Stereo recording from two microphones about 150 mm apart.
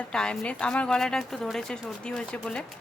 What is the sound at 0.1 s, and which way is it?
Speech, 5° left (ahead or behind).